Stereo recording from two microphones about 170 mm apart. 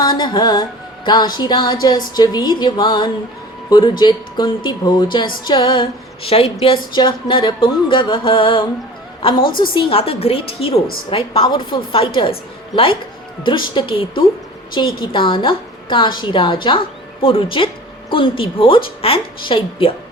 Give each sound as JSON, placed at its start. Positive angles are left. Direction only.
{"t": 0.0, "sound": "music", "side_deg": 25}
{"t": 1.0, "sound": "a woman's voice", "side_deg": 25}